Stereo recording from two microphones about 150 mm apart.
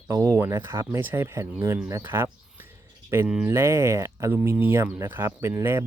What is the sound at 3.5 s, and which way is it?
Speech, 20° right (ahead or behind).